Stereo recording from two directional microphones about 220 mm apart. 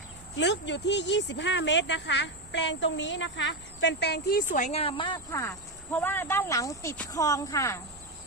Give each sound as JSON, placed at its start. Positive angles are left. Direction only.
{"t": 0.3, "sound": "a woman's voice", "side_deg": 55}